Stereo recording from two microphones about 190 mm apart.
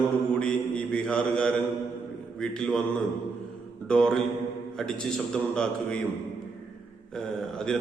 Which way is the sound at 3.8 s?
5° left (ahead or behind).